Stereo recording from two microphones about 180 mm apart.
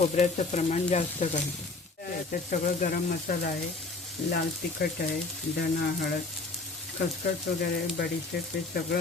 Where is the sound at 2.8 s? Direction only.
50° left (ahead or behind).